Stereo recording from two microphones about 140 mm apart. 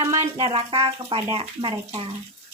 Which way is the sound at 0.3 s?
45° right (ahead or behind).